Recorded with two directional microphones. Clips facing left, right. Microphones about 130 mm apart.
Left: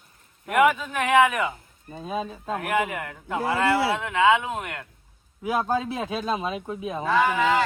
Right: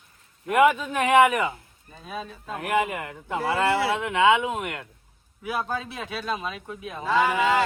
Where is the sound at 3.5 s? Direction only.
15° right (ahead or behind).